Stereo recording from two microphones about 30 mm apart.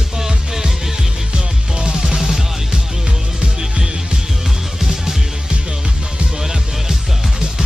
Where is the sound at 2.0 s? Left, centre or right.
Centre.